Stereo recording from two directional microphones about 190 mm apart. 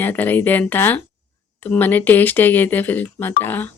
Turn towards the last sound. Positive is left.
turn(degrees=10)  # may be behind; listen again after turning